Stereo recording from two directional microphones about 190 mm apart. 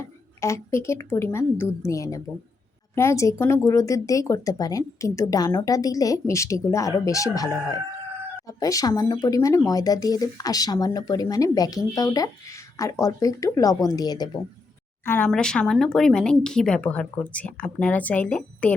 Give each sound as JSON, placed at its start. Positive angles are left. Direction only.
{"t": 0.0, "sound": "a woman's voice", "side_deg": 15}
{"t": 15.0, "sound": "speech", "side_deg": 10}